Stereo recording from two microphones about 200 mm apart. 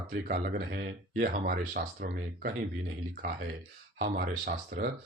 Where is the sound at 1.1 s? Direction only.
50° right (ahead or behind).